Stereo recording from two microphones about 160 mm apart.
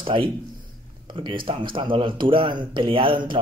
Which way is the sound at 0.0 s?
30° right (ahead or behind).